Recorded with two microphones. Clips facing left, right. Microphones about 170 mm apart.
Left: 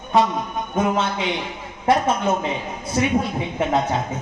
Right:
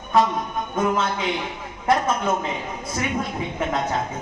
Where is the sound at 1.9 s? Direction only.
30° left (ahead or behind).